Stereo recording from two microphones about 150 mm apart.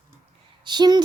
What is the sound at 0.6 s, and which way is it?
Speech, 30° right (ahead or behind).